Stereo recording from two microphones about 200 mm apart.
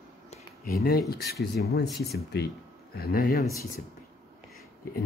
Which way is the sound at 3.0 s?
50° left (ahead or behind).